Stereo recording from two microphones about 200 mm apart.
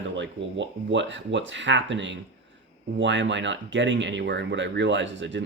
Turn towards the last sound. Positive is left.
turn(degrees=-65)  # may be behind; listen again after turning